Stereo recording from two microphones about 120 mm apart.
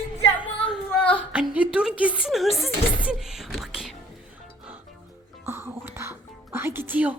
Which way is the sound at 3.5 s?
Centre (ahead or behind).